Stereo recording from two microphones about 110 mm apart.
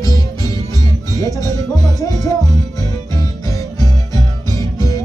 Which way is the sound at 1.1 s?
35° left (ahead or behind).